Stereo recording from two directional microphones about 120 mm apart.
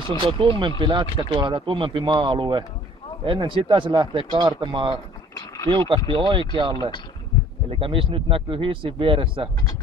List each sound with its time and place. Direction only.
0.1 s speech: 45° right (ahead or behind)
7.8 s speech: 45° right (ahead or behind)